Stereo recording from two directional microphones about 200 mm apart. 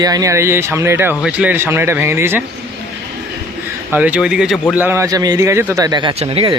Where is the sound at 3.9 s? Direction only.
5° right (ahead or behind).